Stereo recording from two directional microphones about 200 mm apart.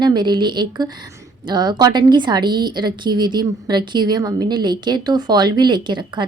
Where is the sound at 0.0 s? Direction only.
20° right (ahead or behind).